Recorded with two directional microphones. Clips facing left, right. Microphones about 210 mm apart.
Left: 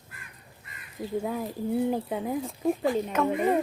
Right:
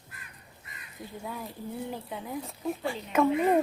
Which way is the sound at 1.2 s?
45° left (ahead or behind).